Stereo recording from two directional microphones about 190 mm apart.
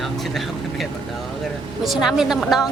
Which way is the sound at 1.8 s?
Centre (ahead or behind).